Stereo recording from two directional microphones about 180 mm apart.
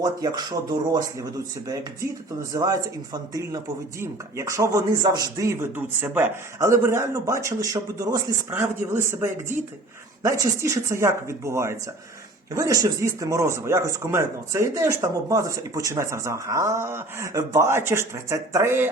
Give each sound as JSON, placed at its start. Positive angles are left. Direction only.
{"t": 0.0, "sound": "speech", "side_deg": -20}